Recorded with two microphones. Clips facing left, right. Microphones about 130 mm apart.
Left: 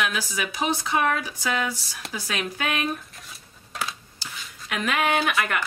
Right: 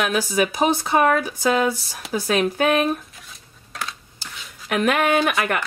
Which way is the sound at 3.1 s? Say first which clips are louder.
Even; centre (ahead or behind).